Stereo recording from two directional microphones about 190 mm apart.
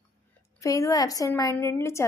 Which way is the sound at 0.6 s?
15° left (ahead or behind).